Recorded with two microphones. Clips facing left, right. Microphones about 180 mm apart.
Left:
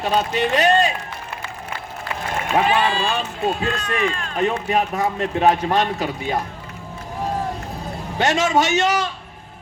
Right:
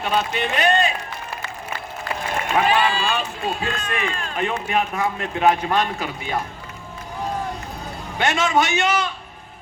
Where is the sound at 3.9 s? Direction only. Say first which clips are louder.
Left 5 dB; 40° left (ahead or behind).